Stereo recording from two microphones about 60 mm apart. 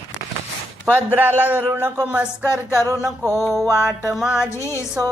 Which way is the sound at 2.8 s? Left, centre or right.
Right.